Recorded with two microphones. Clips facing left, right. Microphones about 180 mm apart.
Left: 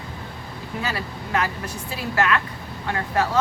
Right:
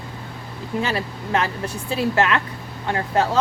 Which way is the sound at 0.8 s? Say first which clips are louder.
Right 4 dB; 25° right (ahead or behind).